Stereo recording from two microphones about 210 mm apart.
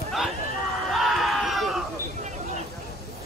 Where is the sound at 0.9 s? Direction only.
Centre (ahead or behind).